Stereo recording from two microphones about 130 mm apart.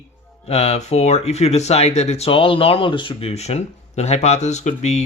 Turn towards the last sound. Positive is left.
turn(degrees=60)  # may be behind; listen again after turning